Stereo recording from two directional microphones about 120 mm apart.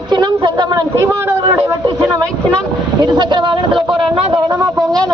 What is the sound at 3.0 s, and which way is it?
Speech, 40° right (ahead or behind).